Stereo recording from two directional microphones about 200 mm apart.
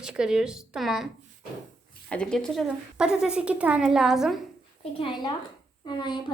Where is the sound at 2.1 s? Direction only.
5° left (ahead or behind).